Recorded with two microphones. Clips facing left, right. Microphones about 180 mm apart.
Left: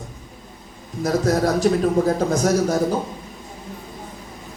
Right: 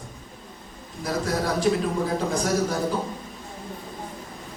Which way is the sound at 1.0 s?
45° left (ahead or behind).